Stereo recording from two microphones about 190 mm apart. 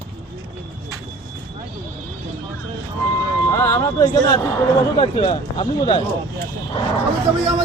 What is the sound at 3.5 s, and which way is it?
Speech, 15° left (ahead or behind).